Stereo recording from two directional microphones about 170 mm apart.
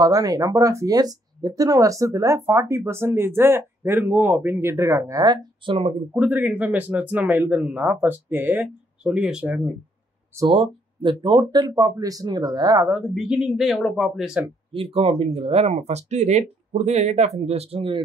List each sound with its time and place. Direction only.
0.0 s speech: 20° right (ahead or behind)
6.1 s speech: 10° right (ahead or behind)
10.5 s speech: 30° right (ahead or behind)
12.8 s speech: 5° right (ahead or behind)
14.7 s speech: 35° right (ahead or behind)